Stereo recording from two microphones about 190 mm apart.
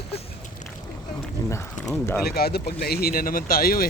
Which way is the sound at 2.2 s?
55° left (ahead or behind).